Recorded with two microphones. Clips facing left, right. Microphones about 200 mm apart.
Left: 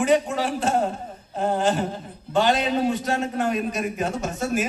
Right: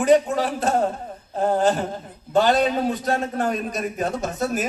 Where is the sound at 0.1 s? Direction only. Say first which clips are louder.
Right 3 dB; 40° right (ahead or behind).